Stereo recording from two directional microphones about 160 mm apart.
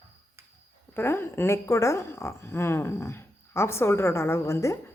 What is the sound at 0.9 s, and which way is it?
A woman's voice, 15° left (ahead or behind).